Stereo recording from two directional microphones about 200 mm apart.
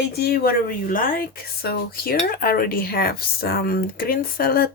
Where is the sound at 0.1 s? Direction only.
50° left (ahead or behind).